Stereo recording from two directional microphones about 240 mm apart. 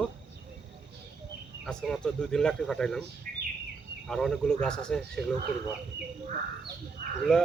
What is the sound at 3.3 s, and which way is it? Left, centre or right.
Bird, right.